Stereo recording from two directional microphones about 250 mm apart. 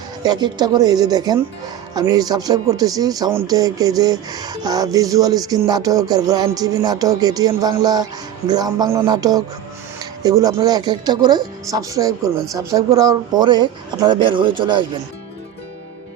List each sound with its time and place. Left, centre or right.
0.2 s speech: centre